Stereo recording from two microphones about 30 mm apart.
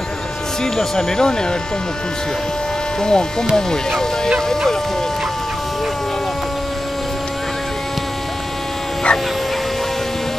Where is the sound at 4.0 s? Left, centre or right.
Centre.